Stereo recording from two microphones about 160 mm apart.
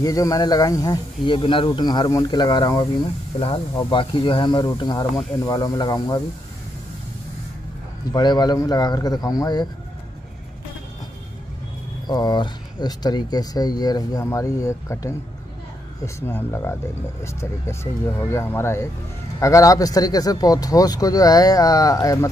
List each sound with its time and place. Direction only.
0.0 s speech: 20° left (ahead or behind)
8.1 s speech: 25° left (ahead or behind)
12.1 s speech: 25° left (ahead or behind)
16.2 s speech: 15° left (ahead or behind)